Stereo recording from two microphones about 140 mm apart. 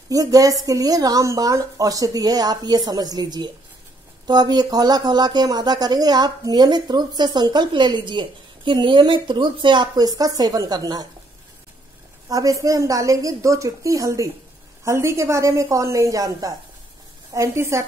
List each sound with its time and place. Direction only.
0.1 s speech: 25° right (ahead or behind)
12.3 s speech: 25° right (ahead or behind)